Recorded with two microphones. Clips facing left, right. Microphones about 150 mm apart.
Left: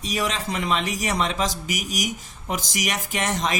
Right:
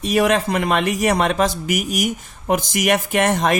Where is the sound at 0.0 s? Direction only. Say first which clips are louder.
Right 10 dB; 60° right (ahead or behind).